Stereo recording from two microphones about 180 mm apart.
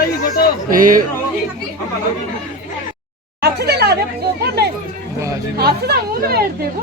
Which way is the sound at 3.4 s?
65° right (ahead or behind).